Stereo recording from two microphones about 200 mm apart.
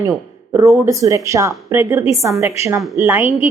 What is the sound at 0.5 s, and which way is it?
A woman's voice, 15° right (ahead or behind).